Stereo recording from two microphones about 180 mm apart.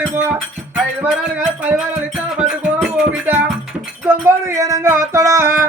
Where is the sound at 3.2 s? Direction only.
10° right (ahead or behind).